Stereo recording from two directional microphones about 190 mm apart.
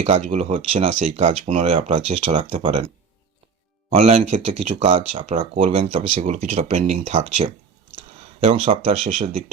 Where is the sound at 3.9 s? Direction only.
30° right (ahead or behind).